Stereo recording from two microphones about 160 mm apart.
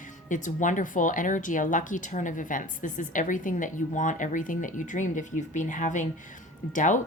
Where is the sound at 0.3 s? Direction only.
50° left (ahead or behind).